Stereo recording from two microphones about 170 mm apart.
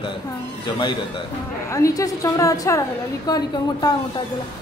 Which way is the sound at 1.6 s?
15° left (ahead or behind).